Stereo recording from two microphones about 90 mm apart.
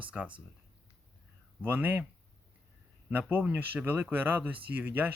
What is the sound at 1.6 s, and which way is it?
Speech, 20° right (ahead or behind).